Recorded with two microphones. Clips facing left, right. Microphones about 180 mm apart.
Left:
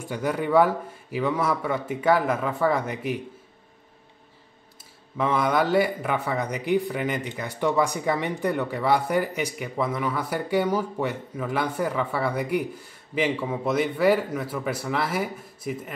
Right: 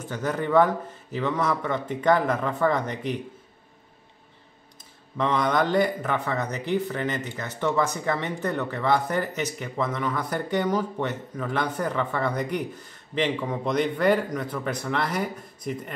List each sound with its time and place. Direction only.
0.0 s speech: 10° left (ahead or behind)
5.1 s speech: 5° left (ahead or behind)